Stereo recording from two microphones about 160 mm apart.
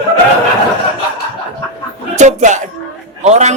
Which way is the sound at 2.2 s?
50° right (ahead or behind).